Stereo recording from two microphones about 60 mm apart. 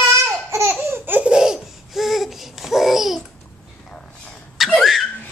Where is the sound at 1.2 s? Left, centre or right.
Centre.